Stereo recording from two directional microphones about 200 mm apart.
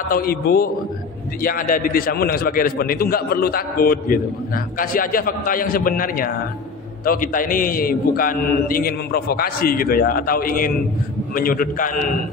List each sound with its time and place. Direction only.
0.1 s a man's voice: 50° left (ahead or behind)